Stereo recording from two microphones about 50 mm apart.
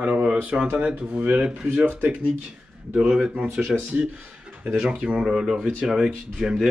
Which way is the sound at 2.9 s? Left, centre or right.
Centre.